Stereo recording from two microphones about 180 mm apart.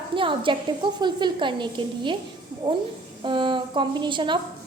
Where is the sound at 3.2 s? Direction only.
25° right (ahead or behind).